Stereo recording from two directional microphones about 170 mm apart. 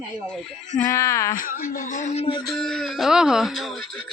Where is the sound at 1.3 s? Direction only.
50° left (ahead or behind).